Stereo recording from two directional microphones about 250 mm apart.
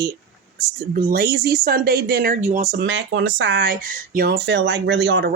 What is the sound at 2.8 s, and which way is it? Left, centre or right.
Speech, right.